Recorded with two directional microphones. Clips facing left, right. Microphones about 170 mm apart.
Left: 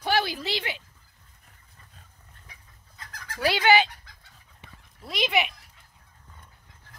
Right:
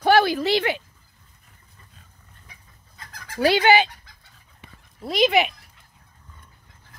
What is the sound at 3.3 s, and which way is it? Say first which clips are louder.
Speech: right 4 dB; 20° right (ahead or behind).